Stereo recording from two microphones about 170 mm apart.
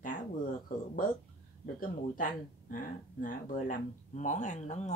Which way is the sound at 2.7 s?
55° left (ahead or behind).